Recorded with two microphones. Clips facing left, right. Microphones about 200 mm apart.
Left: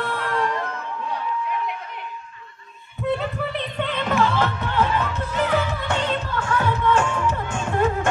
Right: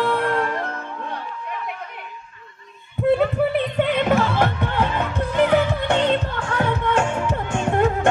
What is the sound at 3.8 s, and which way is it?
Music, 50° right (ahead or behind).